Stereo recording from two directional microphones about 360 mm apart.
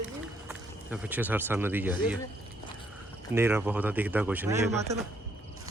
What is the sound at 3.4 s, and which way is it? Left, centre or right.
Speech, centre.